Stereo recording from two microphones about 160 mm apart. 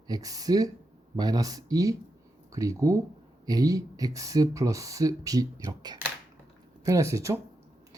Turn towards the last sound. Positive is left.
turn(degrees=-20)  # may be behind; listen again after turning